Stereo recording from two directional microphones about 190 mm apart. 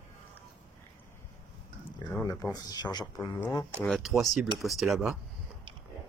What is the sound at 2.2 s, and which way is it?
Speech, 20° left (ahead or behind).